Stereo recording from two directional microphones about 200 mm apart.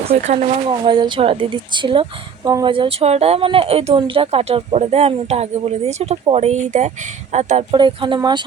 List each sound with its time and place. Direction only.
0.0 s speech: 30° right (ahead or behind)
0.7 s a woman's voice: 20° right (ahead or behind)
7.8 s a woman's voice: 25° right (ahead or behind)